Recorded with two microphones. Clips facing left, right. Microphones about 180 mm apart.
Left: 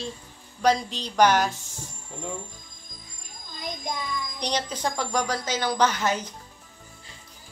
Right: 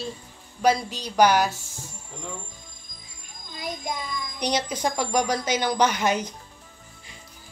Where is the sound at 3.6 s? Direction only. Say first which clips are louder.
Right 2 dB; 5° right (ahead or behind).